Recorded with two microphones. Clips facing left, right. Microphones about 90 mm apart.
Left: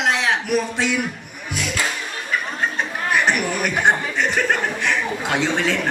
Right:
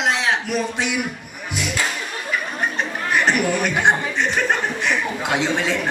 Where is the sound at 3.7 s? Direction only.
20° right (ahead or behind).